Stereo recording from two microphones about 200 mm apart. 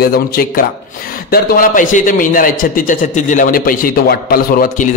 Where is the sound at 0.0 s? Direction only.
50° left (ahead or behind).